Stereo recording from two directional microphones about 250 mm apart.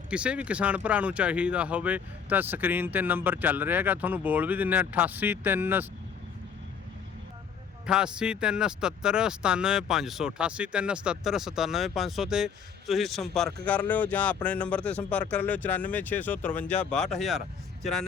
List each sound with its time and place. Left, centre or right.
0.1 s speech: centre
7.9 s speech: centre